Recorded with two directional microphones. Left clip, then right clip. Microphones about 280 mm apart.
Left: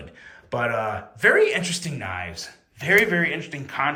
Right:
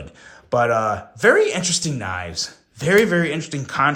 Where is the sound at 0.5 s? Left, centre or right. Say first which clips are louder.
Right 6 dB; centre.